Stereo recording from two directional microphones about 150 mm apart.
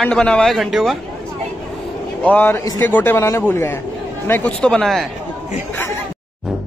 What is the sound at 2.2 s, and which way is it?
A man's voice, 10° left (ahead or behind).